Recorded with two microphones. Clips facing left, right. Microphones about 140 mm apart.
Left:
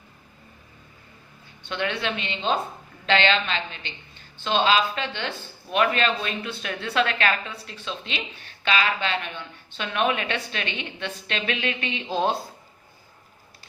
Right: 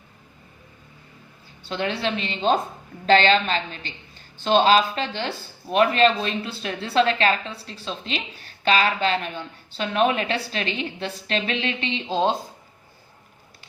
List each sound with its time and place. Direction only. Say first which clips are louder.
1.6 s speech: right 2 dB; 35° right (ahead or behind)